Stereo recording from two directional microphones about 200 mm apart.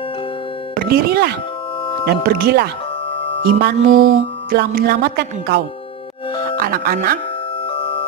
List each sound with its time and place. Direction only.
0.7 s speech: 50° right (ahead or behind)
6.6 s speech: 50° right (ahead or behind)
7.7 s music: 25° left (ahead or behind)